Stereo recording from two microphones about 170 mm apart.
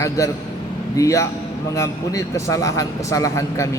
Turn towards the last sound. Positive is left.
turn(degrees=20)  # may be behind; listen again after turning